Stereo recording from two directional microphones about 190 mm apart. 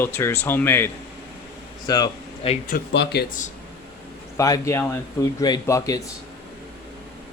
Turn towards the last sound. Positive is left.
turn(degrees=15)  # may be behind; listen again after turning